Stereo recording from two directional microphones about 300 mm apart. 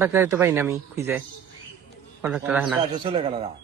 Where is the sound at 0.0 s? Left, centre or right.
Centre.